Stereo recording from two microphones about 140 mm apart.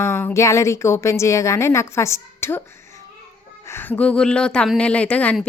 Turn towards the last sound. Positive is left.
turn(degrees=10)  # may be behind; listen again after turning